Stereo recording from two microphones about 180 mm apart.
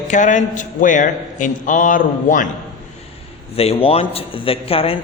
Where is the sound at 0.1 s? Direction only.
45° left (ahead or behind).